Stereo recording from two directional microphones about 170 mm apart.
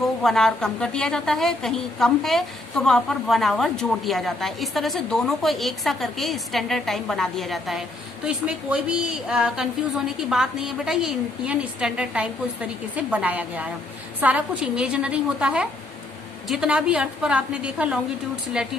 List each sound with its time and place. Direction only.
0.0 s a woman's voice: centre (ahead or behind)